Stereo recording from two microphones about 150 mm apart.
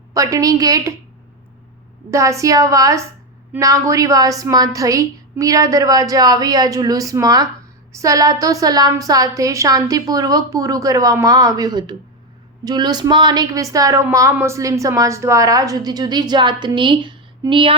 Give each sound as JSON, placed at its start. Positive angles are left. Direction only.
{"t": 0.1, "sound": "a woman's voice", "side_deg": -20}
{"t": 2.0, "sound": "a woman's voice", "side_deg": -20}